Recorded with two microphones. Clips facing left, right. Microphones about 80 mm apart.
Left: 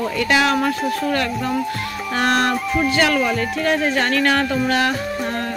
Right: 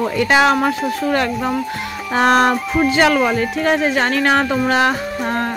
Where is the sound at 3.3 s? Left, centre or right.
Centre.